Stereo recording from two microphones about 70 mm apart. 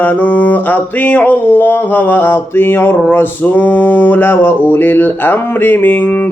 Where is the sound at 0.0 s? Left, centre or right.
Left.